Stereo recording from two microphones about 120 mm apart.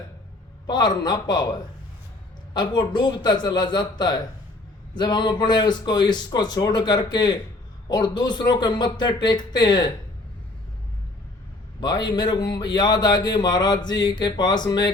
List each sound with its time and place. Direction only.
0.7 s a man's voice: 35° left (ahead or behind)
11.8 s a man's voice: 35° left (ahead or behind)